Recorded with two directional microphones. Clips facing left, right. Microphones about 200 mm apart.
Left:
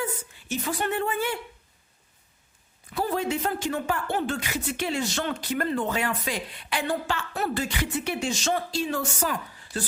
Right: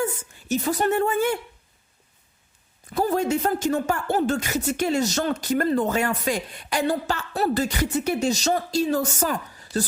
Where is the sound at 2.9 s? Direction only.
45° right (ahead or behind).